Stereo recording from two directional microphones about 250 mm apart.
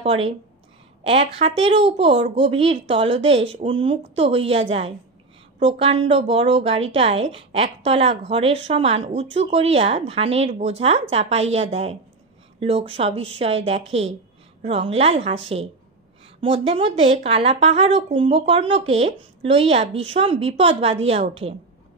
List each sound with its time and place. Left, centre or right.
0.0 s a woman's voice: right
16.3 s a woman's voice: right